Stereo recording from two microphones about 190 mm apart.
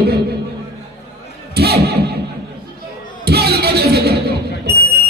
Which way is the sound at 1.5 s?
55° right (ahead or behind).